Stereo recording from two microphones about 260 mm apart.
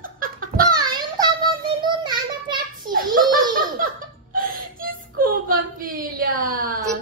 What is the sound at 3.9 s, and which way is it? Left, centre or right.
Whimper, right.